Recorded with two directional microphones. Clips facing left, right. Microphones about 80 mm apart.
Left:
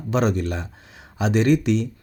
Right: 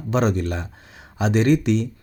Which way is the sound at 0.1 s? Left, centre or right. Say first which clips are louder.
Right 1 dB; right.